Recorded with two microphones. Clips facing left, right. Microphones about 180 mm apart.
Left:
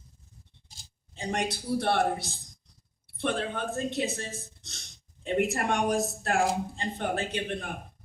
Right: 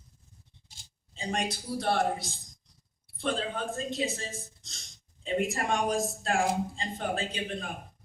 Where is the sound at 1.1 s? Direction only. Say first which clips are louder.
Left 2 dB; 65° left (ahead or behind).